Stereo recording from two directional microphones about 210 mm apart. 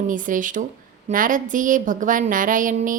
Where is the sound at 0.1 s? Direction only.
40° right (ahead or behind).